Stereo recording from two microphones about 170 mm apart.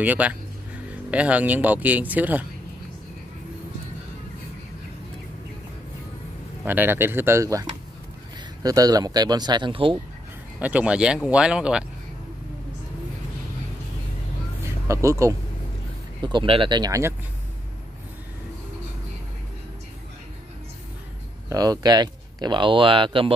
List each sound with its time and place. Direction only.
0.0 s speech: 10° right (ahead or behind)
6.6 s speech: 10° right (ahead or behind)
8.6 s speech: 20° right (ahead or behind)
10.6 s speech: 10° right (ahead or behind)
14.6 s a sound: 20° right (ahead or behind)
16.2 s speech: 25° right (ahead or behind)
21.5 s speech: 20° right (ahead or behind)